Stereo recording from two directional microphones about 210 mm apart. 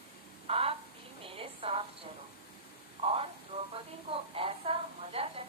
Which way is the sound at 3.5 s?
35° right (ahead or behind).